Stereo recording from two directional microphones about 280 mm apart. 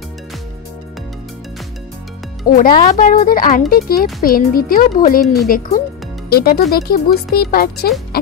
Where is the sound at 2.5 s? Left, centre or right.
Left.